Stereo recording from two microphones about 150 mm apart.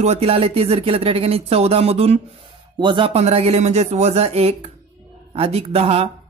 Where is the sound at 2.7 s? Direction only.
30° right (ahead or behind).